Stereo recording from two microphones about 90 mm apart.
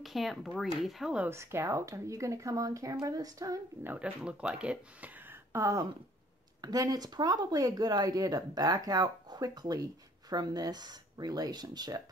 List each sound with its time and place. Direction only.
0.0 s speech: centre (ahead or behind)
1.3 s speech: 30° right (ahead or behind)
3.8 s speech: 15° right (ahead or behind)
5.3 s a sound: 30° right (ahead or behind)
6.6 s speech: 45° right (ahead or behind)